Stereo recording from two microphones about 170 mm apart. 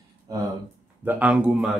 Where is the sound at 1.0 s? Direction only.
10° right (ahead or behind).